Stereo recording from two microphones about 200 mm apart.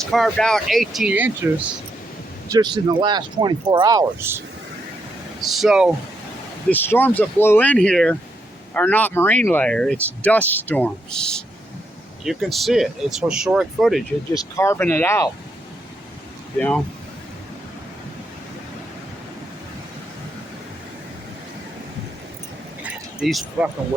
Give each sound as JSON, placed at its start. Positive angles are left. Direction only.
{"t": 0.0, "sound": "speech", "side_deg": 0}
{"t": 2.5, "sound": "speech", "side_deg": -20}
{"t": 5.4, "sound": "speech", "side_deg": 0}
{"t": 6.7, "sound": "speech", "side_deg": 10}
{"t": 14.3, "sound": "speech", "side_deg": 15}
{"t": 16.6, "sound": "speech", "side_deg": 5}
{"t": 23.2, "sound": "speech", "side_deg": 0}